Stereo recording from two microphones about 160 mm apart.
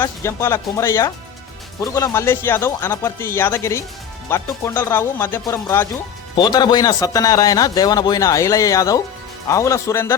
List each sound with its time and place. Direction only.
0.0 s a man's voice: 15° left (ahead or behind)